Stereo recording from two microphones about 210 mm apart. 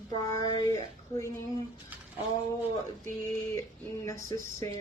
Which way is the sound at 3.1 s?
15° left (ahead or behind).